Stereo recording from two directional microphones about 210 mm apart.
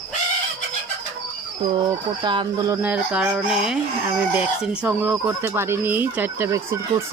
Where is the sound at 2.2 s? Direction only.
20° right (ahead or behind).